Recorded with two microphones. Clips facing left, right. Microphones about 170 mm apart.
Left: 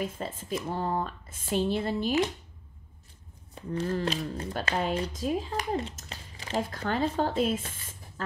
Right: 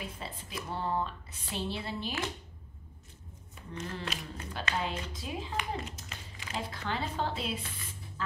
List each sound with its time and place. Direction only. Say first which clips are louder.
0.0 s speech: left 8 dB; 45° left (ahead or behind)
3.5 s speech: left 10 dB; 35° left (ahead or behind)
4.8 s speech: left 9 dB; 45° left (ahead or behind)